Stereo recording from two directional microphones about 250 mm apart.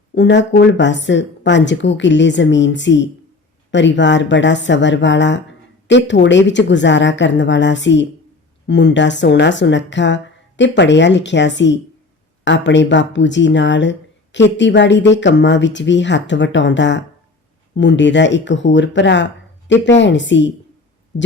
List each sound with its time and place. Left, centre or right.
0.1 s a woman's voice: left